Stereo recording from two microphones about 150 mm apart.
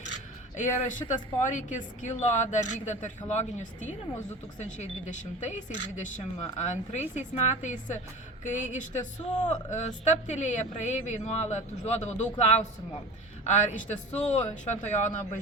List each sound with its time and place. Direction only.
0.5 s a woman's voice: 55° left (ahead or behind)